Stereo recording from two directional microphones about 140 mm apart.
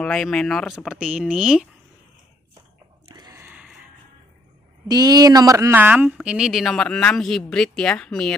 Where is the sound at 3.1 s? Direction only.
25° right (ahead or behind).